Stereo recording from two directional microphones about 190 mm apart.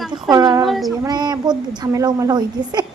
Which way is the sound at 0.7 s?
Centre (ahead or behind).